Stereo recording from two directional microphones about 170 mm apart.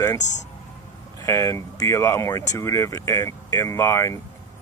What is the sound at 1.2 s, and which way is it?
Speech, 15° left (ahead or behind).